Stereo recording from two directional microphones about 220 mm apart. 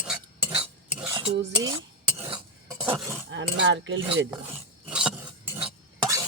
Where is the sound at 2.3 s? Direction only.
15° right (ahead or behind).